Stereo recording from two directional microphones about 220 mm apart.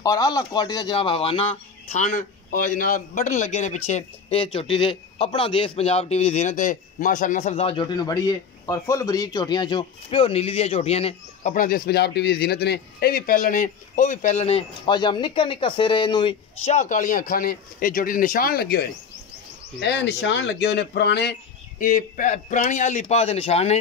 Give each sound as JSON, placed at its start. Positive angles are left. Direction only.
{"t": 0.0, "sound": "speech", "side_deg": 15}
{"t": 11.5, "sound": "speech", "side_deg": 40}